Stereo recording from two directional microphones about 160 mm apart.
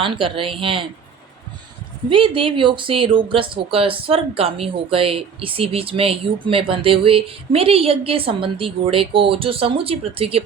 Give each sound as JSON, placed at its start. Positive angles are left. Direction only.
{"t": 0.0, "sound": "speech", "side_deg": -35}
{"t": 2.0, "sound": "speech", "side_deg": -30}